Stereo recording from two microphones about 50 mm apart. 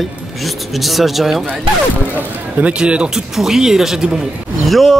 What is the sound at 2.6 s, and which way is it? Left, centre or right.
Speech, right.